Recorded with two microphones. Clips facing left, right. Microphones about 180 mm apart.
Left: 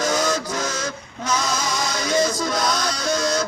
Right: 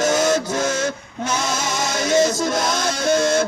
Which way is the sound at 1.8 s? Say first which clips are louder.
Right 3 dB; 50° right (ahead or behind).